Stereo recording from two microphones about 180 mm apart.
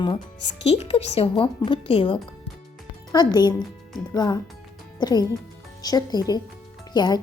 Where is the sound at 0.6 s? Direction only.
35° left (ahead or behind).